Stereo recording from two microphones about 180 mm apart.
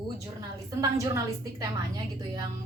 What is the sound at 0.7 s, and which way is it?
A woman's voice, 20° right (ahead or behind).